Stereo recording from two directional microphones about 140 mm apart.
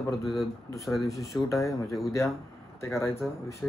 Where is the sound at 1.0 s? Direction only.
20° left (ahead or behind).